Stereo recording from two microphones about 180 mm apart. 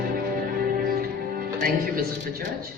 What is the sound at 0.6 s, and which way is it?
Music, 55° right (ahead or behind).